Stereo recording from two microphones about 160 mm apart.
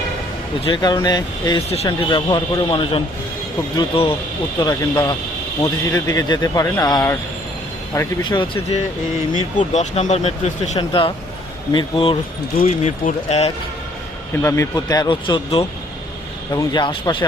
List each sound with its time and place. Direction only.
0.6 s speech: 25° left (ahead or behind)
1.7 s speech: 35° left (ahead or behind)
4.6 s speech: 20° left (ahead or behind)
8.2 s speech: 30° left (ahead or behind)
9.3 s speech: 50° left (ahead or behind); by 12.1 s 30° left (ahead or behind)
12.5 s speech: 50° left (ahead or behind)
14.4 s speech: 20° left (ahead or behind)